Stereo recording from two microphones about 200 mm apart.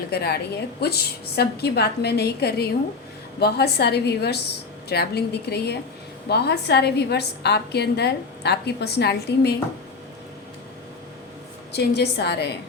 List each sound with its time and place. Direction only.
0.1 s a woman's voice: 55° left (ahead or behind)
11.7 s a woman's voice: 55° left (ahead or behind)